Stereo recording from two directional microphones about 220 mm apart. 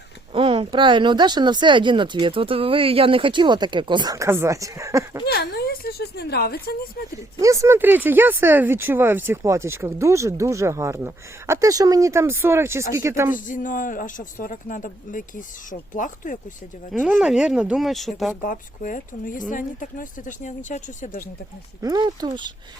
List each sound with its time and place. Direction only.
0.3 s speech: 25° right (ahead or behind)
5.2 s speech: 45° left (ahead or behind)
7.3 s speech: 15° right (ahead or behind)
13.3 s a man's voice: 35° left (ahead or behind)
16.9 s speech: 5° right (ahead or behind)
18.4 s a man's voice: 40° left (ahead or behind)
21.8 s speech: 15° right (ahead or behind)